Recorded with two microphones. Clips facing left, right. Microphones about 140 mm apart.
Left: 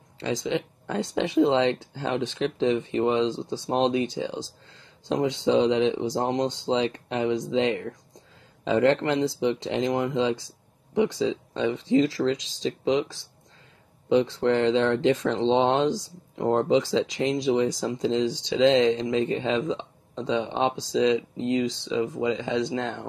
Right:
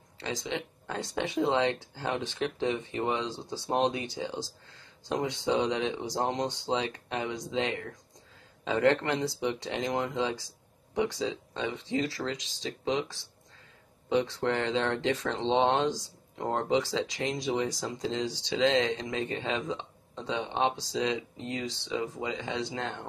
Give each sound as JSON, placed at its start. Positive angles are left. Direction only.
{"t": 0.2, "sound": "speech", "side_deg": 25}
{"t": 14.1, "sound": "speech", "side_deg": 25}
{"t": 22.7, "sound": "speech", "side_deg": 20}